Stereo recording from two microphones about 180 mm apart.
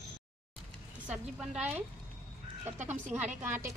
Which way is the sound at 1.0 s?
5° right (ahead or behind).